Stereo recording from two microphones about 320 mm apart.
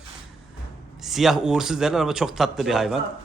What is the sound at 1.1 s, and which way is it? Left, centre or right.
Speech, centre.